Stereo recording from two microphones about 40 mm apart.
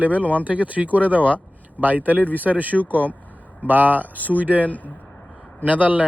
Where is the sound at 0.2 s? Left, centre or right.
Left.